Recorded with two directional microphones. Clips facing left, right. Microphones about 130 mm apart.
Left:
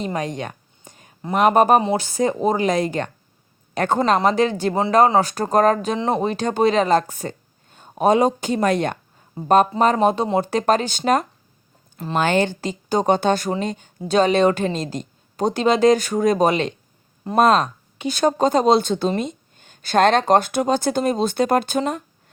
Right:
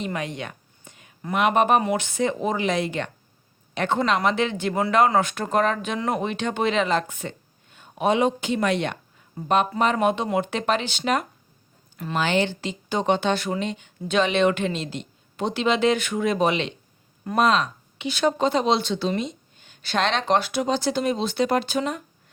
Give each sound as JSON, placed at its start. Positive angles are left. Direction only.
{"t": 0.0, "sound": "a sound", "side_deg": 35}
{"t": 1.2, "sound": "a woman's voice", "side_deg": 35}
{"t": 12.2, "sound": "a woman's voice", "side_deg": 45}